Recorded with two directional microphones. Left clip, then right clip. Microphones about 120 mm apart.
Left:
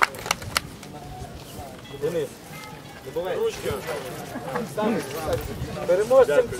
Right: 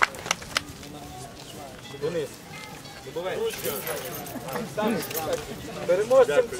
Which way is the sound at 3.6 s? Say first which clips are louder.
Left 2 dB; 20° left (ahead or behind).